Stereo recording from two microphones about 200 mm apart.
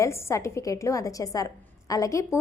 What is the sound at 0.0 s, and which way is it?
A woman's voice, 15° left (ahead or behind).